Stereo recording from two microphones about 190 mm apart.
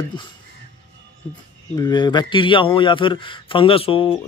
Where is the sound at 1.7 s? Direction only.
20° left (ahead or behind).